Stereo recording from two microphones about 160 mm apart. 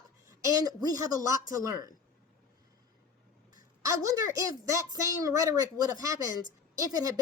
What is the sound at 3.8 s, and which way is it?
Speech, 20° right (ahead or behind).